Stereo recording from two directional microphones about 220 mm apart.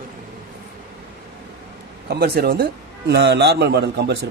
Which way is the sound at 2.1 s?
45° right (ahead or behind).